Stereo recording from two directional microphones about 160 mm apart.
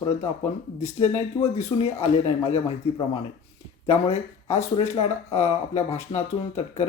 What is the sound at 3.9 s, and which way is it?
Speech, 40° left (ahead or behind).